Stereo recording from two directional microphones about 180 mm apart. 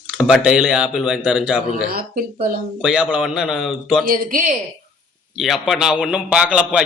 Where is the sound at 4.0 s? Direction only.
50° right (ahead or behind).